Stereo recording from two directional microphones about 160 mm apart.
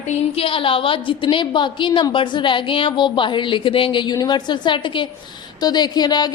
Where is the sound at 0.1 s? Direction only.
35° left (ahead or behind).